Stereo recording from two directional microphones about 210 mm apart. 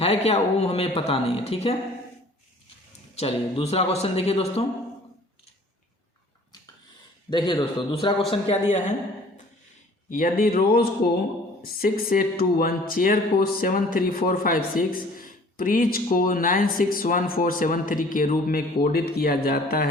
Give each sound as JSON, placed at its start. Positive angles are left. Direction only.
{"t": 0.0, "sound": "speech", "side_deg": 30}
{"t": 3.2, "sound": "speech", "side_deg": 30}
{"t": 7.3, "sound": "speech", "side_deg": 20}
{"t": 10.1, "sound": "speech", "side_deg": 40}